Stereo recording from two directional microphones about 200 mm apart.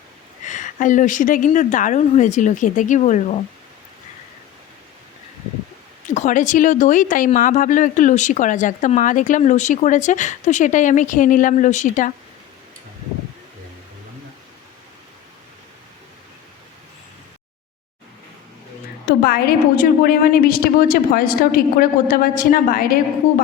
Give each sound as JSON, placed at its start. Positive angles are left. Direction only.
{"t": 0.4, "sound": "speech", "side_deg": 40}
{"t": 6.1, "sound": "speech", "side_deg": 40}
{"t": 19.0, "sound": "a woman's voice", "side_deg": 50}